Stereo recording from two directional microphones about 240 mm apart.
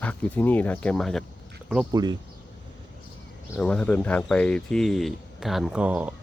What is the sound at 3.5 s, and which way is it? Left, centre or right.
Speech, centre.